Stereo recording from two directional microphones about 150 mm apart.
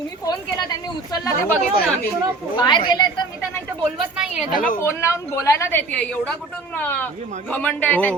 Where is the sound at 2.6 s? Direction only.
30° left (ahead or behind).